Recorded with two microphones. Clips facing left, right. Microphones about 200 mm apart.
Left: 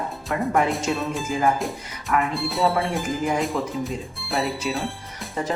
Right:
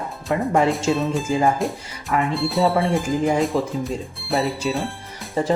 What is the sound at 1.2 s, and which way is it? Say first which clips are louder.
Speech: right 4 dB; 30° right (ahead or behind).